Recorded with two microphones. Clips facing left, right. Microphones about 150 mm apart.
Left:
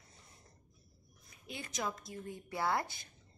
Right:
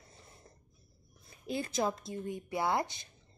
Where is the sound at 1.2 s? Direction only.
35° right (ahead or behind).